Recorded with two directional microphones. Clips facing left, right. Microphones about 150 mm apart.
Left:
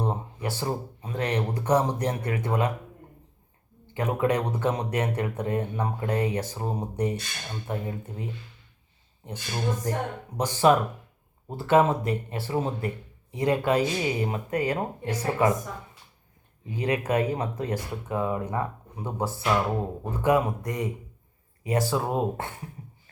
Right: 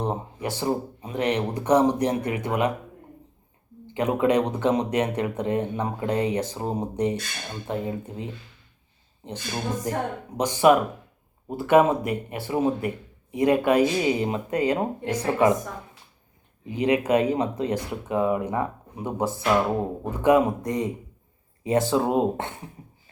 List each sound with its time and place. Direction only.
0.0 s speech: 20° right (ahead or behind)
3.9 s speech: 20° right (ahead or behind)
16.6 s speech: 20° right (ahead or behind)